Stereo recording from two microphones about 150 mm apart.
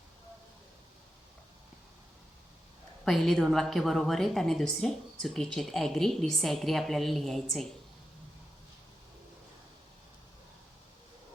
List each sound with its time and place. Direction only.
3.0 s a woman's voice: centre (ahead or behind)